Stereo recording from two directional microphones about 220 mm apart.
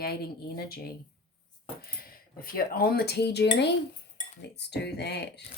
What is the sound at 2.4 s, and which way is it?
Speech, 40° left (ahead or behind).